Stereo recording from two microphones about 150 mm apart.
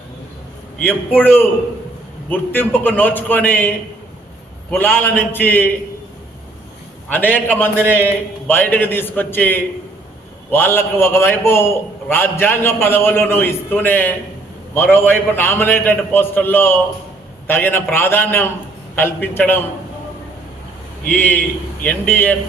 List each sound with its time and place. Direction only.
0.8 s a man's voice: 10° left (ahead or behind)
4.7 s a man's voice: 10° left (ahead or behind)
7.1 s a man's voice: 10° left (ahead or behind)
7.8 s a man's voice: 15° right (ahead or behind)
8.4 s a man's voice: 10° left (ahead or behind)
21.1 s a man's voice: 10° left (ahead or behind)